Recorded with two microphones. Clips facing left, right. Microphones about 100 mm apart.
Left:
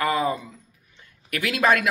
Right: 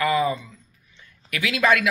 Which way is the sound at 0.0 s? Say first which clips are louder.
Right 2 dB; 40° left (ahead or behind).